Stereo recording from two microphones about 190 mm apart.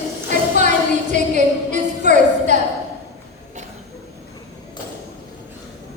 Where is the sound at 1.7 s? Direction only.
40° right (ahead or behind).